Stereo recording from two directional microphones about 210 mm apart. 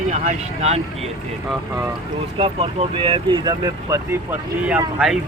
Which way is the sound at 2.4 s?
25° right (ahead or behind).